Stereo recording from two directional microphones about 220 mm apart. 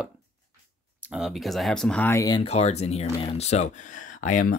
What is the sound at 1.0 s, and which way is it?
Speech, centre (ahead or behind).